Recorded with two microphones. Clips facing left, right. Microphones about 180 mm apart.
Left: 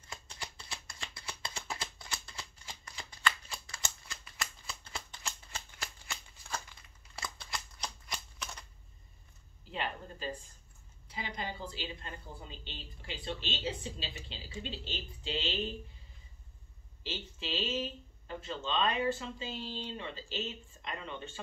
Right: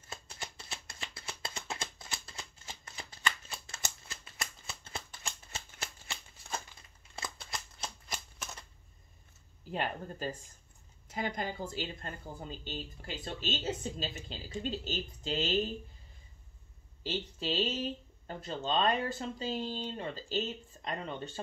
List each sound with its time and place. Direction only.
0.7 s shuffling cards: 25° right (ahead or behind)
9.7 s a woman's voice: 45° right (ahead or behind)
17.0 s speech: 40° right (ahead or behind)